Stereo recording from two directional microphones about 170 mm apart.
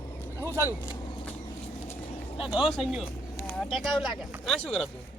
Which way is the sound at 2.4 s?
5° right (ahead or behind).